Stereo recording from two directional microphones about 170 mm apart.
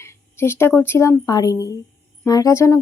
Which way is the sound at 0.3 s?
15° left (ahead or behind).